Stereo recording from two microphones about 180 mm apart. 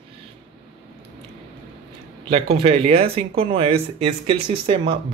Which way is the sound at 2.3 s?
30° right (ahead or behind).